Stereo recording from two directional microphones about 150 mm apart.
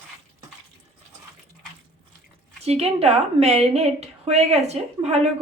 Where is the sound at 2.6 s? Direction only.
45° right (ahead or behind).